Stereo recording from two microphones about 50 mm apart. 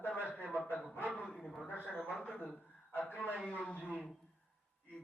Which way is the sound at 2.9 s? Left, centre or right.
Left.